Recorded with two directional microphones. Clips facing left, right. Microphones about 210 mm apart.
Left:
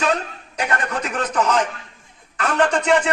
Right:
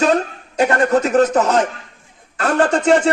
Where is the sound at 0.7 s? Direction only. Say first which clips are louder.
Right 7 dB; 30° right (ahead or behind).